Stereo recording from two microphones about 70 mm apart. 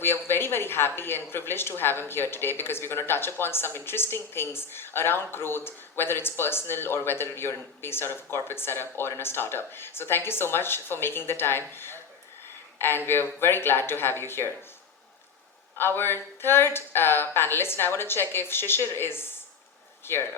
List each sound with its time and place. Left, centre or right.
0.0 s a woman's voice: left
15.8 s speech: left